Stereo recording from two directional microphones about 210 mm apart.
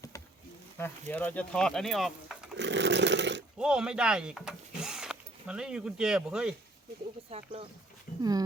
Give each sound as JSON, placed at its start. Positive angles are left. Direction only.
{"t": 0.8, "sound": "speech", "side_deg": 10}
{"t": 2.6, "sound": "roar", "side_deg": -55}
{"t": 3.6, "sound": "speech", "side_deg": -5}
{"t": 7.3, "sound": "speech", "side_deg": -30}
{"t": 8.2, "sound": "speech", "side_deg": -15}